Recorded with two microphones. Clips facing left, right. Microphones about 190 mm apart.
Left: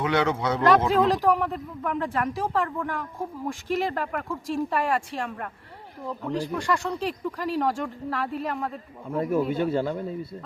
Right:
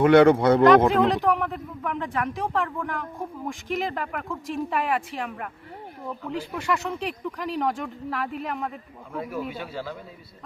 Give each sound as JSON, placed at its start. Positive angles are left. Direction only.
{"t": 0.0, "sound": "speech", "side_deg": -55}
{"t": 1.0, "sound": "speech", "side_deg": 0}
{"t": 6.6, "sound": "speech", "side_deg": -5}
{"t": 9.1, "sound": "speech", "side_deg": 45}